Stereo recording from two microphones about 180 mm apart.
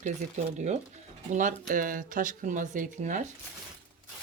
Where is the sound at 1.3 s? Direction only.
45° right (ahead or behind).